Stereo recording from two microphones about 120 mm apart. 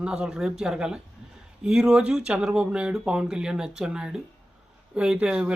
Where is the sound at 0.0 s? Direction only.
5° right (ahead or behind).